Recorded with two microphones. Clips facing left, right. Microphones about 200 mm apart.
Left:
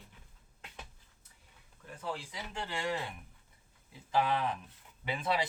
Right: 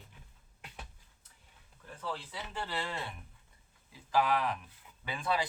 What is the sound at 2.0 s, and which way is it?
Speech, 10° left (ahead or behind).